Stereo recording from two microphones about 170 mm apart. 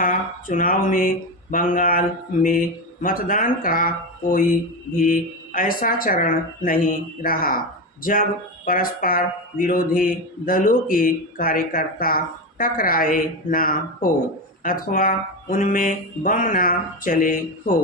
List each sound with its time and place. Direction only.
0.0 s speech: 50° left (ahead or behind)
8.6 s speech: 55° left (ahead or behind)